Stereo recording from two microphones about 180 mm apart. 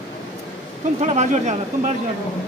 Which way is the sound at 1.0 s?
40° right (ahead or behind).